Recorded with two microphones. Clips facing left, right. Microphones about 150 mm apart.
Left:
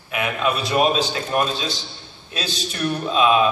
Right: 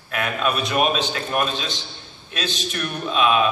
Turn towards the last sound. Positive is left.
turn(degrees=30)  # may be behind; listen again after turning